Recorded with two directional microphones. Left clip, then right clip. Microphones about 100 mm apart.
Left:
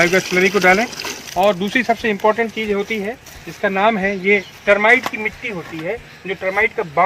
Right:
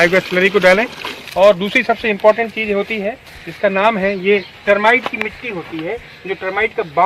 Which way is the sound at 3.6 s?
90° right.